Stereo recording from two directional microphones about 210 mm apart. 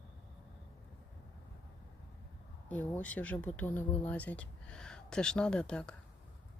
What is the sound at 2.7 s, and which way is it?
Speech, 10° left (ahead or behind).